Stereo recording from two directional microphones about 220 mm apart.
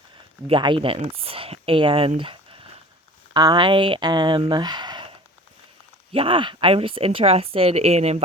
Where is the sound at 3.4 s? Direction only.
20° right (ahead or behind).